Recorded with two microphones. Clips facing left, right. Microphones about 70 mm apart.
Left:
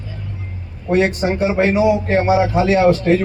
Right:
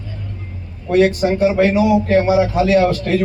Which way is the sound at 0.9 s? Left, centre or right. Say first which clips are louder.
Right 2 dB; left.